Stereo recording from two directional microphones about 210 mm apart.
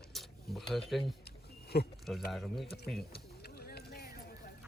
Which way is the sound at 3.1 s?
50° left (ahead or behind).